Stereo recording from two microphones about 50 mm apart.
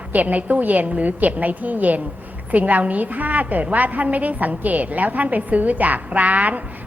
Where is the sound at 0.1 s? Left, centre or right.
Right.